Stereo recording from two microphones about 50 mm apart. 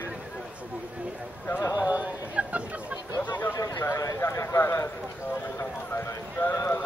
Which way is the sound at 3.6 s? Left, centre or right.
Left.